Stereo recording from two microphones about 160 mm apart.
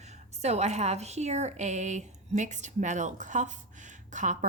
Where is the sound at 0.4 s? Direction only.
45° right (ahead or behind).